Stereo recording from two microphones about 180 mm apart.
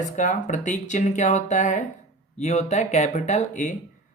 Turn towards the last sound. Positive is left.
turn(degrees=45)  # may be behind; listen again after turning